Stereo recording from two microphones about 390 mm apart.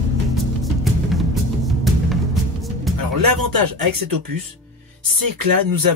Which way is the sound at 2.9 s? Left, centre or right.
Right.